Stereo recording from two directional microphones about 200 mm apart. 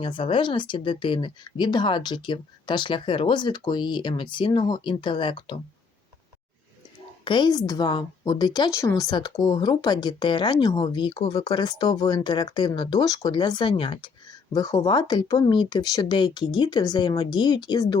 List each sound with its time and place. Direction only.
0.0 s a woman's voice: 25° left (ahead or behind)
7.3 s a woman's voice: 25° left (ahead or behind)